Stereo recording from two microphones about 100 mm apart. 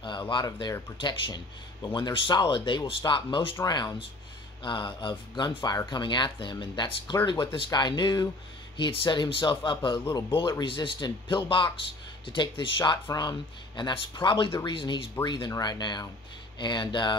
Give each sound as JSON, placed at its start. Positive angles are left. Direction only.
{"t": 0.0, "sound": "a sound", "side_deg": 50}
{"t": 1.0, "sound": "speech", "side_deg": 45}
{"t": 8.7, "sound": "speech", "side_deg": 55}
{"t": 10.6, "sound": "speech", "side_deg": 55}
{"t": 15.2, "sound": "speech", "side_deg": 45}